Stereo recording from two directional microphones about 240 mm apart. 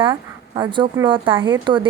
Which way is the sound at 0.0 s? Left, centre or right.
Centre.